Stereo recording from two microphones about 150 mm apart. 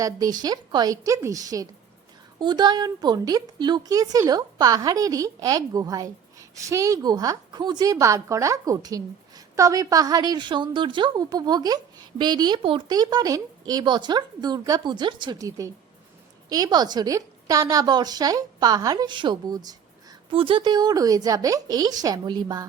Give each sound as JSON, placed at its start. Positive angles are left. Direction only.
{"t": 0.0, "sound": "a woman's voice", "side_deg": -25}
{"t": 20.3, "sound": "a woman's voice", "side_deg": -35}